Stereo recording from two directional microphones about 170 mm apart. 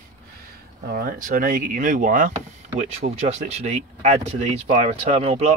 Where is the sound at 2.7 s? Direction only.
40° right (ahead or behind).